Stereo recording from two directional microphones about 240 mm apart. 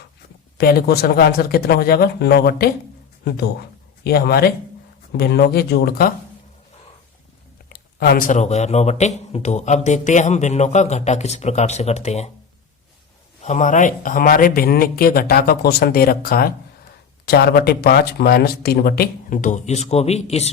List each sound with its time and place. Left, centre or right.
0.6 s speech: left
4.0 s speech: left
7.7 s speech: left
13.4 s speech: left